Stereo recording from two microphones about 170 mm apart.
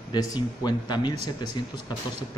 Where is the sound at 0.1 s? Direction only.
20° left (ahead or behind).